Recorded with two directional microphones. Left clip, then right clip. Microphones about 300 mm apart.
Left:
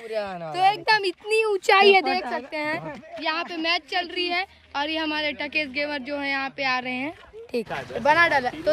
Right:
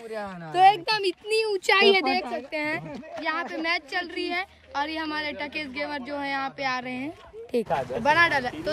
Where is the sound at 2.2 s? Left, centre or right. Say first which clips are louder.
Left 2 dB; centre.